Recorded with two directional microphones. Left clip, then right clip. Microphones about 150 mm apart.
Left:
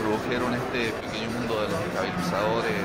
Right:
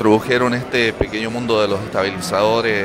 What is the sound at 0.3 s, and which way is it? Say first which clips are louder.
Speech: right 10 dB; 70° right (ahead or behind).